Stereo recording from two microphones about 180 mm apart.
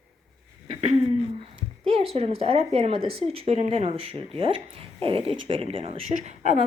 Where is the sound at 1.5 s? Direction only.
30° right (ahead or behind).